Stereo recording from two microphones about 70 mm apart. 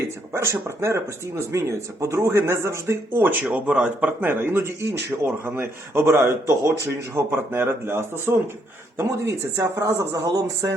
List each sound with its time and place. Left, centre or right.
0.3 s speech: right
3.7 s speech: centre
4.2 s speech: right
9.0 s speech: right